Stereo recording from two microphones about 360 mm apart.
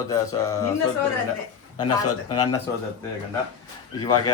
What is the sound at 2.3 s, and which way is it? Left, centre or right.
Speech, centre.